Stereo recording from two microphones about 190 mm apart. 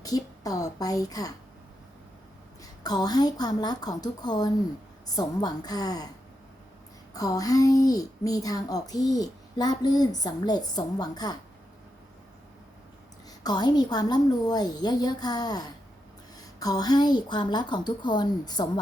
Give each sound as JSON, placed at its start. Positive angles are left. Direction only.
{"t": 0.0, "sound": "a child's voice", "side_deg": 20}
{"t": 2.8, "sound": "a child's voice", "side_deg": 20}
{"t": 7.1, "sound": "a child's voice", "side_deg": 20}
{"t": 13.4, "sound": "a child's voice", "side_deg": 20}